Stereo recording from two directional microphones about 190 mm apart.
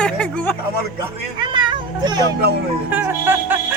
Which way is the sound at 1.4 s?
25° right (ahead or behind).